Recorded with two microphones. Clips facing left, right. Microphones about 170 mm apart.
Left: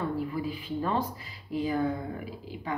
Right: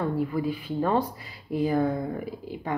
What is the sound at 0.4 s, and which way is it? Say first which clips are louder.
A woman's voice: right 5 dB; 45° right (ahead or behind).